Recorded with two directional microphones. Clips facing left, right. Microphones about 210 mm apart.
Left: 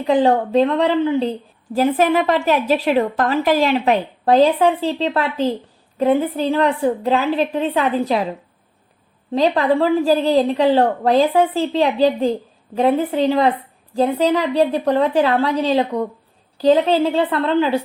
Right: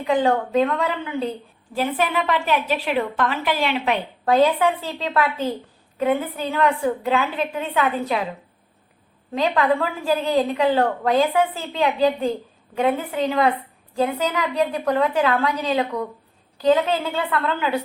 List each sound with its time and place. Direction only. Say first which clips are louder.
0.0 s a woman's voice: left 4 dB; 35° left (ahead or behind)